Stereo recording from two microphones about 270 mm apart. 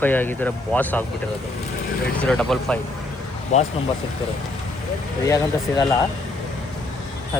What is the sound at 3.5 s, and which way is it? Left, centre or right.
Speech, left.